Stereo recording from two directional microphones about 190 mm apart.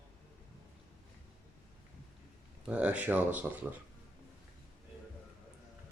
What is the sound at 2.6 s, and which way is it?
Speech, 5° right (ahead or behind).